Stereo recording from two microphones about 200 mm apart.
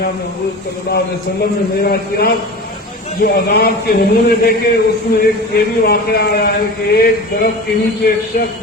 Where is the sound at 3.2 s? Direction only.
50° left (ahead or behind).